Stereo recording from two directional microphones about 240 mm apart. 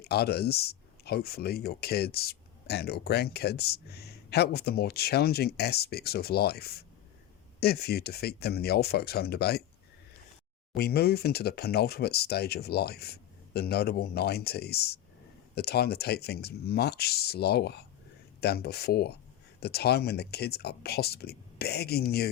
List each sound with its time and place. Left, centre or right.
0.0 s speech: left
10.8 s speech: left